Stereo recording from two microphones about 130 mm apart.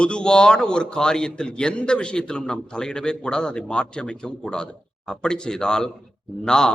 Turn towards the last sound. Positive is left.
turn(degrees=5)  # may be behind; listen again after turning